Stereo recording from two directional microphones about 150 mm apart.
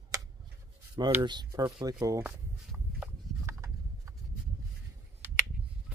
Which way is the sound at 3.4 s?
20° right (ahead or behind).